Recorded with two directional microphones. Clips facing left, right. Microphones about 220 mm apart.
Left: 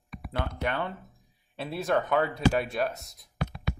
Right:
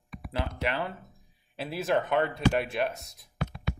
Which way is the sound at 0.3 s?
5° right (ahead or behind).